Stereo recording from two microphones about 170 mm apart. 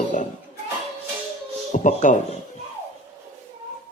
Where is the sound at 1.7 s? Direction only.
45° left (ahead or behind).